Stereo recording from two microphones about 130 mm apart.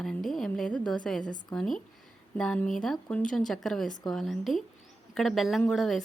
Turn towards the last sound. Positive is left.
turn(degrees=0)  # may be behind; listen again after turning